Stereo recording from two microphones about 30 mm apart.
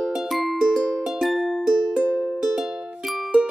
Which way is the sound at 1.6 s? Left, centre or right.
Right.